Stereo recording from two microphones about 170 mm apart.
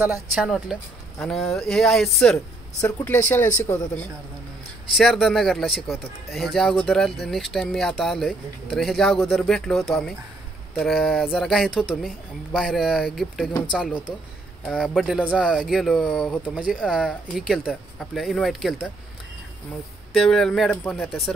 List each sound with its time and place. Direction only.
0.3 s speech: centre (ahead or behind)
2.8 s speech: 10° left (ahead or behind)
4.9 s speech: centre (ahead or behind)
13.5 s speech: 20° left (ahead or behind)
14.7 s speech: centre (ahead or behind)
20.1 s speech: centre (ahead or behind)